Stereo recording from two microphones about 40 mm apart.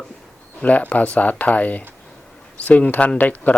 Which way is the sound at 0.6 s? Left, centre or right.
Left.